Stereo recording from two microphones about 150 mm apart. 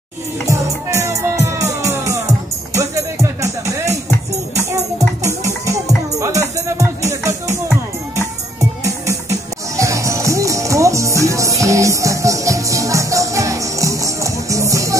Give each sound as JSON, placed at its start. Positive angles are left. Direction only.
{"t": 0.5, "sound": "speech", "side_deg": -20}
{"t": 1.8, "sound": "music", "side_deg": -20}
{"t": 9.3, "sound": "music", "side_deg": -20}